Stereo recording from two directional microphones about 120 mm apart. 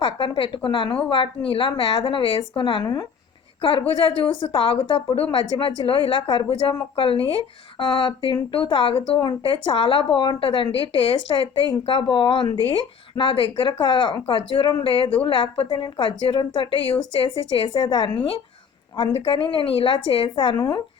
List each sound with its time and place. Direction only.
0.0 s a woman's voice: 45° left (ahead or behind)
3.6 s speech: 45° left (ahead or behind)